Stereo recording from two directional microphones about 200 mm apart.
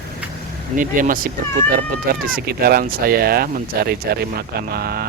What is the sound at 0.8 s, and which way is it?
Speech, 40° right (ahead or behind).